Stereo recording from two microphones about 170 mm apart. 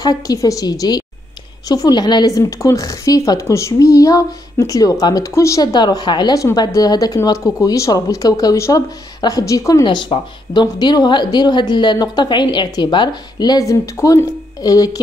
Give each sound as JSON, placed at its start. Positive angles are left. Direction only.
{"t": 0.0, "sound": "speech", "side_deg": 20}